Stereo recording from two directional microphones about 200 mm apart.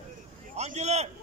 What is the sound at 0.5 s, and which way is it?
Speech, 35° right (ahead or behind).